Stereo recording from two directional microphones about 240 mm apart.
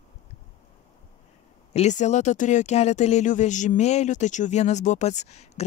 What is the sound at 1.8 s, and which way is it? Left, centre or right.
Speech, left.